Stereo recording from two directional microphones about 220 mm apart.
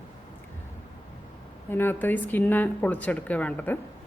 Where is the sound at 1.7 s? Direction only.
10° left (ahead or behind).